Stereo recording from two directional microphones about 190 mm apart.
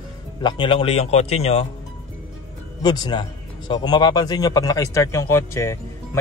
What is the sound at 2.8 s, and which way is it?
A man's voice, 20° left (ahead or behind).